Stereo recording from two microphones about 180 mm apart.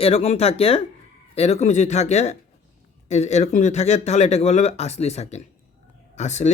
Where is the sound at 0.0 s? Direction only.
35° left (ahead or behind).